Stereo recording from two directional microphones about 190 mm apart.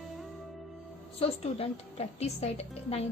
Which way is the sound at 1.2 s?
30° left (ahead or behind).